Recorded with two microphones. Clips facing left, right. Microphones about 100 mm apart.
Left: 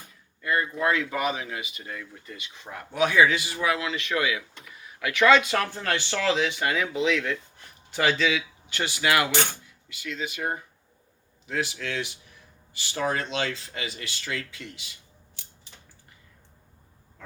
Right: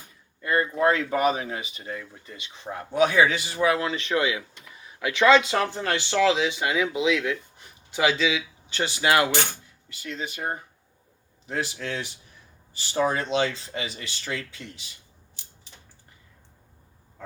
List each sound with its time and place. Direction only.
0.4 s speech: 35° right (ahead or behind)